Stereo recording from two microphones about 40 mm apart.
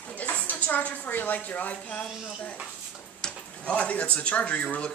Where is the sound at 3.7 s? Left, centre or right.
Left.